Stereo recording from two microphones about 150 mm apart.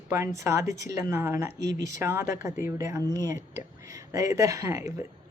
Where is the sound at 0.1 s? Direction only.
20° right (ahead or behind).